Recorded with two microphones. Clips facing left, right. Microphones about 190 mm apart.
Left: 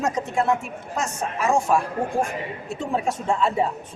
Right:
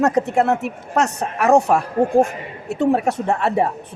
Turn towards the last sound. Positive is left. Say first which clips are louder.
# right 3 dB
turn(degrees=-65)  # may be behind; listen again after turning